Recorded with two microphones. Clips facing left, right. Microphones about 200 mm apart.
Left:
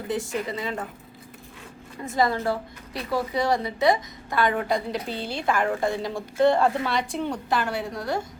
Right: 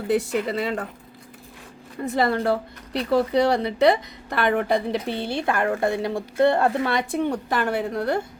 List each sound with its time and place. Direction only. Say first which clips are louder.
0.1 s speech: right 6 dB; 70° right (ahead or behind)
2.0 s a woman's voice: right 2 dB; 65° right (ahead or behind)